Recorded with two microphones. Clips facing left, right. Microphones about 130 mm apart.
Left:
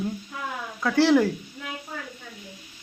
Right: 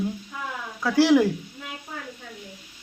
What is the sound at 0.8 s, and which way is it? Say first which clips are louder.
Speech: right 1 dB; 10° right (ahead or behind).